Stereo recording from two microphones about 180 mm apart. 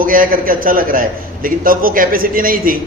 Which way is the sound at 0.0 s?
50° right (ahead or behind).